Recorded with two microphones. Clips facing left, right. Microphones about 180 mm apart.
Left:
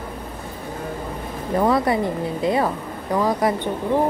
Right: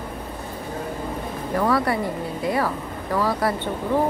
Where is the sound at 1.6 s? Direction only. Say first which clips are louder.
Left 3 dB; 20° left (ahead or behind).